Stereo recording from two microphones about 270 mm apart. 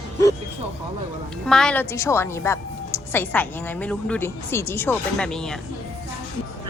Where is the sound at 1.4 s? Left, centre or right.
Centre.